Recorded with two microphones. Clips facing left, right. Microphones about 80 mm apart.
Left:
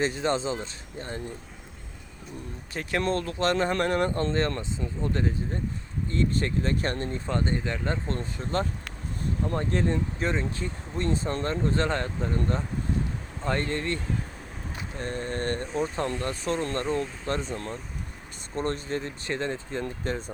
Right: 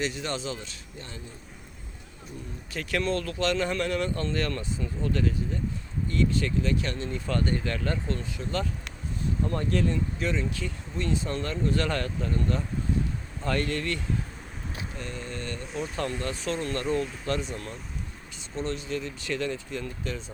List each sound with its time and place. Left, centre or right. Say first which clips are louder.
0.0 s speech: left 5 dB; left
3.0 s speech: left 2 dB; left
7.3 s speech: right 1 dB; left
8.0 s speech: left 1 dB; left
14.9 s speech: left 8 dB; left
16.0 s speech: left 2 dB; left
18.5 s speech: left 2 dB; left